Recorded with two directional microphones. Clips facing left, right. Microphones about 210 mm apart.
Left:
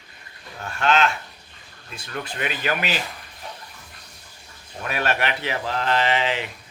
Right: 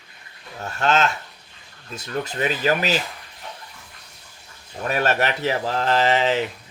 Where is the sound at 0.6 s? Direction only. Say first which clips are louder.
Even; 40° right (ahead or behind).